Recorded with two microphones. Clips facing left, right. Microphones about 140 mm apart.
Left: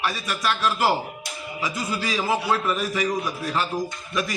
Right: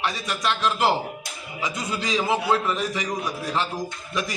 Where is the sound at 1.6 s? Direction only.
20° right (ahead or behind).